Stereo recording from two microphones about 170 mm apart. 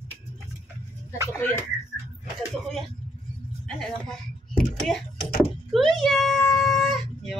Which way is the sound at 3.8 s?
5° left (ahead or behind).